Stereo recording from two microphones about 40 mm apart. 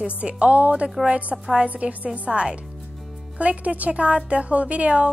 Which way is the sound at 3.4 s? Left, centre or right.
Right.